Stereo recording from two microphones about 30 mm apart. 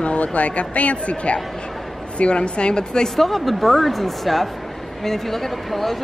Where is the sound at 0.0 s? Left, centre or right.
Left.